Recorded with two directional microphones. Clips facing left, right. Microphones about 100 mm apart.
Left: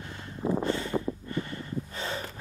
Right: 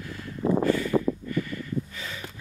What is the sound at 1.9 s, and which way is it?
Snort, 35° left (ahead or behind).